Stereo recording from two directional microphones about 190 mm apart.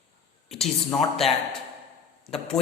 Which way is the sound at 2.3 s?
30° left (ahead or behind).